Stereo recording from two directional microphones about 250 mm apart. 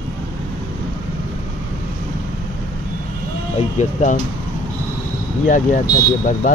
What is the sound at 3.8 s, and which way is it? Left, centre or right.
Speech, left.